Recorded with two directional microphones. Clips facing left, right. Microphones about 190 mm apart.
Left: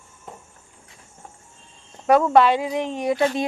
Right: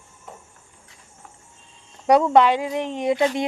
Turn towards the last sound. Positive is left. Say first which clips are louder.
# even
turn(degrees=-20)  # may be behind; listen again after turning